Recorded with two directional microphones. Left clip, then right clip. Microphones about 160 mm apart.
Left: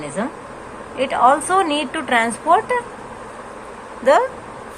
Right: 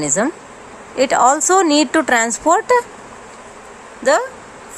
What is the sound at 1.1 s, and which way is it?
Speech, 75° right (ahead or behind).